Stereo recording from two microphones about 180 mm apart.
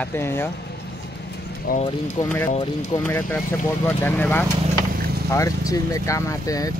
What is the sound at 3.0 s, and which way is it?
Speech, 10° left (ahead or behind).